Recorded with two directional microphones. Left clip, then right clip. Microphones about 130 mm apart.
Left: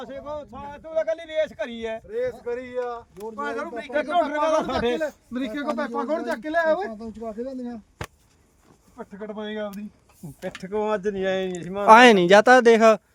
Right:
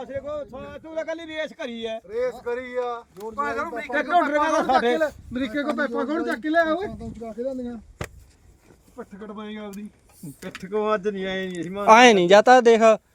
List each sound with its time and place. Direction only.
0.9 s a man's voice: 60° right (ahead or behind)
1.7 s speech: 15° left (ahead or behind)
2.0 s speech: 5° right (ahead or behind)
2.6 s speech: 20° right (ahead or behind)
5.3 s speech: 15° left (ahead or behind)
10.4 s speech: 5° left (ahead or behind)
11.9 s speech: 35° left (ahead or behind)